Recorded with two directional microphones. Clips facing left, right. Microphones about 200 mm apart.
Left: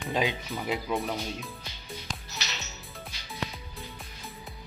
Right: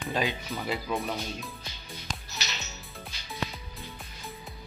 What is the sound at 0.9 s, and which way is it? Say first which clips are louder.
Speech: left 1 dB; centre (ahead or behind).